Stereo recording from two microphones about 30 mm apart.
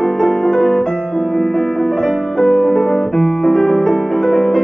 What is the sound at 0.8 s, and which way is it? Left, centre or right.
Music, centre.